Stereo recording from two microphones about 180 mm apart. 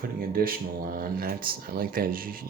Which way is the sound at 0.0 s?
55° right (ahead or behind).